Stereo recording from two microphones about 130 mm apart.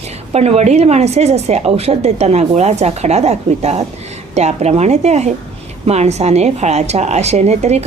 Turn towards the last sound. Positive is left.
turn(degrees=-55)  # may be behind; listen again after turning